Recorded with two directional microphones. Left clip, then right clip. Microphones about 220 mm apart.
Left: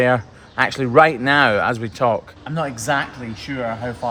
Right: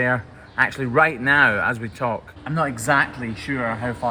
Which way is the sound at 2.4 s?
15° left (ahead or behind).